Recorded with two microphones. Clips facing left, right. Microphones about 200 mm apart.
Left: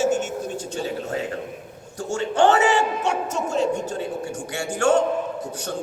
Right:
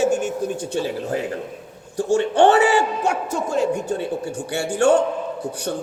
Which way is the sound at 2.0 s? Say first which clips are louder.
Right 4 dB; 35° right (ahead or behind).